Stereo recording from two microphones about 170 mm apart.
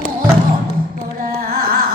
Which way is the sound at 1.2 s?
60° right (ahead or behind).